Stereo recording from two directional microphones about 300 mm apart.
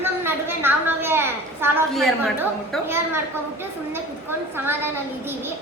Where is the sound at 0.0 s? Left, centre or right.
Centre.